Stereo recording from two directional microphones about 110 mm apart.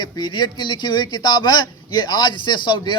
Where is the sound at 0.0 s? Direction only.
40° left (ahead or behind).